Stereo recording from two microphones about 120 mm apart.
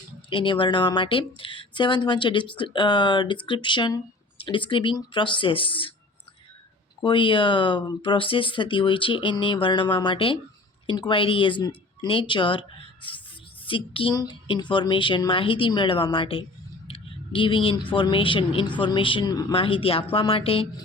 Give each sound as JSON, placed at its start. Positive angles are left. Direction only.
{"t": 0.3, "sound": "speech", "side_deg": 45}
{"t": 7.0, "sound": "speech", "side_deg": 45}
{"t": 16.0, "sound": "a sound", "side_deg": 45}
{"t": 17.9, "sound": "speech", "side_deg": 45}
{"t": 19.5, "sound": "speech", "side_deg": 50}